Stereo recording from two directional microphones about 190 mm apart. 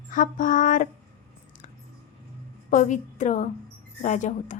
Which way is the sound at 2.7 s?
40° left (ahead or behind).